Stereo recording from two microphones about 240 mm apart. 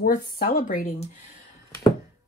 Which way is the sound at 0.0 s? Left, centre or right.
Left.